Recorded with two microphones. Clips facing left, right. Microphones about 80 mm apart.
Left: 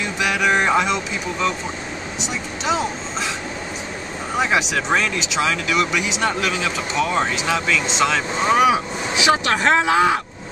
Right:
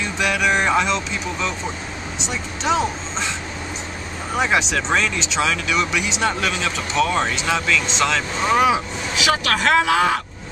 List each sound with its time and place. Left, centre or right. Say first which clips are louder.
0.2 s music: left 1 dB; centre
2.2 s speech: right 1 dB; centre
4.4 s speech: even; centre
8.4 s speech: left 1 dB; centre